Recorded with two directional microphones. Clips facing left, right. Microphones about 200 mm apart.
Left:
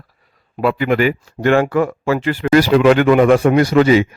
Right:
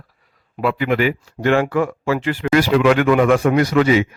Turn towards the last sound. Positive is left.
turn(degrees=35)  # may be behind; listen again after turning